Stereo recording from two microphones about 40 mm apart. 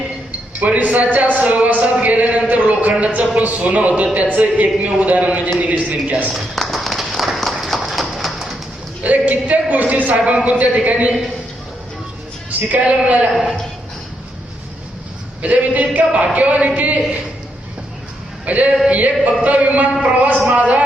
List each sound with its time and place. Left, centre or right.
0.3 s speech: right
6.6 s run: centre
9.0 s a man's voice: right
12.5 s music: right
12.8 s speech: right
13.3 s a woman's voice: centre
15.4 s speech: right
18.4 s speech: right